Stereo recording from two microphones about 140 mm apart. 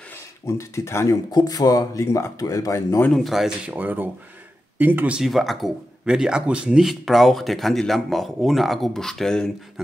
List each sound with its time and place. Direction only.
0.5 s speech: 20° left (ahead or behind)
3.1 s speech: centre (ahead or behind)